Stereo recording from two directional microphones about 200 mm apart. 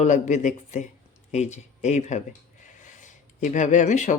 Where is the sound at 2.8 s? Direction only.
40° left (ahead or behind).